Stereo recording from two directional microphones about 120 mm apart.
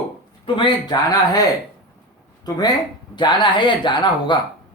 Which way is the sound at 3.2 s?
40° left (ahead or behind).